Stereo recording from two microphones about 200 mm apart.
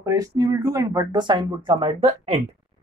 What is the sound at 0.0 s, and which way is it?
Speech, 15° right (ahead or behind).